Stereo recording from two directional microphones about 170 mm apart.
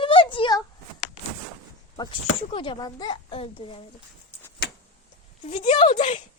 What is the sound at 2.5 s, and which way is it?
A woman's voice, 30° left (ahead or behind).